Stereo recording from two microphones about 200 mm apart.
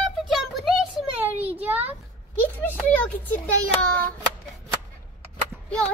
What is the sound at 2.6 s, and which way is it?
Speech, 10° left (ahead or behind).